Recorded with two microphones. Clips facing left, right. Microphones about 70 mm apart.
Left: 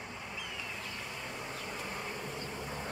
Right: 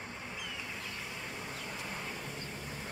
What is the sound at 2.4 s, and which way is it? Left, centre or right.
Vehicle, left.